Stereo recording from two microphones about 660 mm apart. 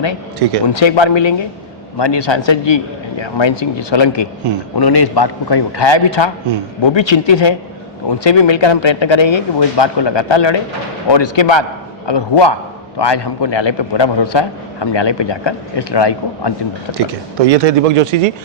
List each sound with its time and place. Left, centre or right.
0.7 s a man's voice: left
4.5 s a man's voice: right
4.8 s a man's voice: left
17.4 s speech: right